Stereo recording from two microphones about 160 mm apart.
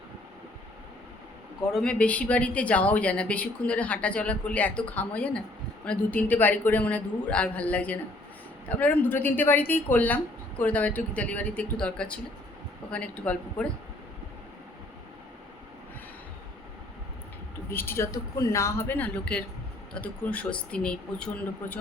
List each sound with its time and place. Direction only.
1.7 s speech: 5° left (ahead or behind)
17.7 s speech: 15° left (ahead or behind)